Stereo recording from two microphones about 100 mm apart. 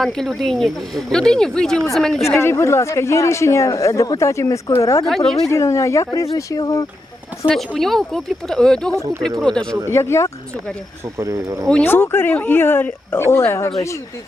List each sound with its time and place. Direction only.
0.0 s speech: 5° left (ahead or behind)
2.2 s speech: 25° left (ahead or behind)
7.4 s speech: 5° left (ahead or behind)
9.9 s speech: 25° left (ahead or behind)
11.2 s speech: 35° right (ahead or behind)
11.8 s speech: 25° left (ahead or behind)